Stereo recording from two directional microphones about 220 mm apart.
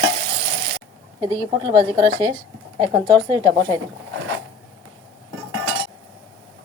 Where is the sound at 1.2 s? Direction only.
20° right (ahead or behind).